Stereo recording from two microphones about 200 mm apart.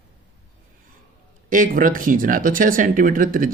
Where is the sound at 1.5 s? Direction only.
40° right (ahead or behind).